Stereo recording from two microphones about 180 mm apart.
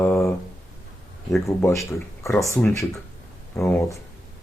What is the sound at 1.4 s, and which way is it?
Speech, 15° left (ahead or behind).